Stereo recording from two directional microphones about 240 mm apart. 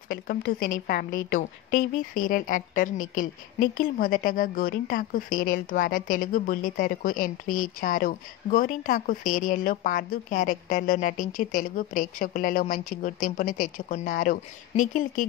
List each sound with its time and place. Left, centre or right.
0.1 s a woman's voice: left